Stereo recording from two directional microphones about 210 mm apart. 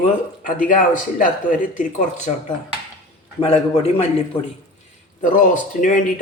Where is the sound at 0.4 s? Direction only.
40° left (ahead or behind).